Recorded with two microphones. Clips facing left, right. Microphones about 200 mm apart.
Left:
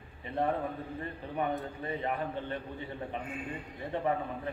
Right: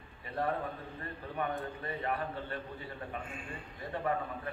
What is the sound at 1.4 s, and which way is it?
A man's voice, 20° left (ahead or behind).